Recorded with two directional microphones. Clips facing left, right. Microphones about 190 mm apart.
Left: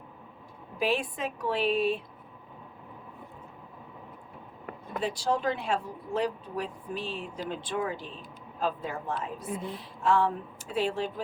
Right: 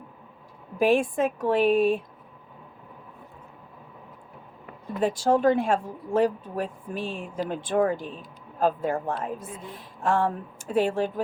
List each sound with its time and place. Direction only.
0.8 s speech: 50° right (ahead or behind)
4.9 s speech: 50° right (ahead or behind)